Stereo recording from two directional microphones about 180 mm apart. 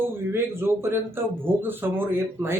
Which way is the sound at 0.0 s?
10° right (ahead or behind).